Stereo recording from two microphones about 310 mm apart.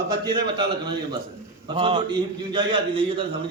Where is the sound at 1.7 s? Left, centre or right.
Centre.